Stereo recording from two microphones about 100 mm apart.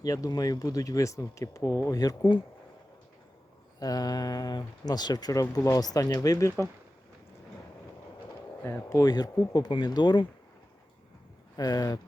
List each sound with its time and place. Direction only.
0.0 s speech: 35° left (ahead or behind)
3.8 s speech: 40° left (ahead or behind)
8.6 s speech: 20° left (ahead or behind)
9.0 s speech: 40° left (ahead or behind)
11.5 s speech: 40° left (ahead or behind)